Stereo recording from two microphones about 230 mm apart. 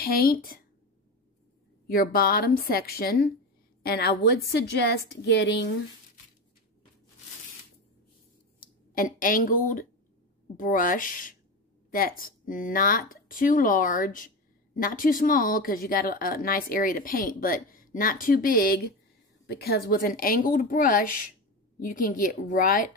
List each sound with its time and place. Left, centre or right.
0.1 s speech: left
1.9 s a woman's voice: left
8.5 s speech: left